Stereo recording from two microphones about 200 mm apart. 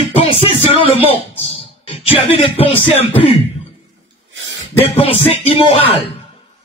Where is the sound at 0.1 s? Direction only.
30° left (ahead or behind).